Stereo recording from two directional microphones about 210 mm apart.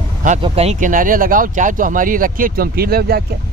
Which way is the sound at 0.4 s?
30° right (ahead or behind).